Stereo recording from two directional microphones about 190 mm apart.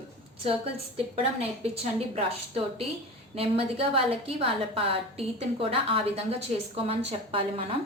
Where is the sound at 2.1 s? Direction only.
30° right (ahead or behind).